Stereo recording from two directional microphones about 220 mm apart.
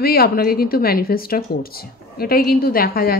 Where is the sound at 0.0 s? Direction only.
45° left (ahead or behind).